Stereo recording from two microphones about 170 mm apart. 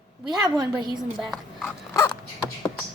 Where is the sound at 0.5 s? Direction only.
25° right (ahead or behind).